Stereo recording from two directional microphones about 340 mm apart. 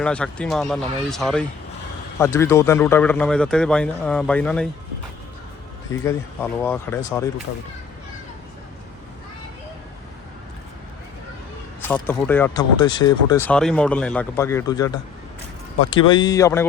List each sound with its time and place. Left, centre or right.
0.0 s speech: centre
5.9 s speech: centre
11.8 s speech: centre